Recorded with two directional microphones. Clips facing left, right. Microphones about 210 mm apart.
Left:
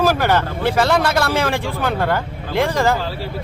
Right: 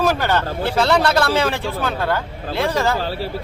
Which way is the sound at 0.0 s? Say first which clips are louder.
Left 2 dB; 10° left (ahead or behind).